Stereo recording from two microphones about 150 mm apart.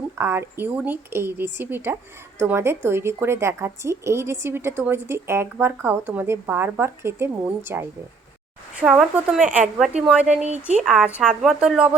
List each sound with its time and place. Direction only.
0.2 s speech: 15° right (ahead or behind)
8.7 s speech: 5° right (ahead or behind)
9.4 s speech: 55° right (ahead or behind)
9.7 s speech: 5° right (ahead or behind)